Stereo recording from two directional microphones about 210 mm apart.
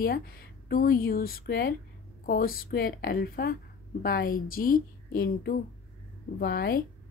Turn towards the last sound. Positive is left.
turn(degrees=45)  # may be behind; listen again after turning